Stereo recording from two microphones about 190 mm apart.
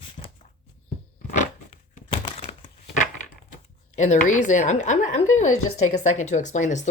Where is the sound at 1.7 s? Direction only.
30° left (ahead or behind).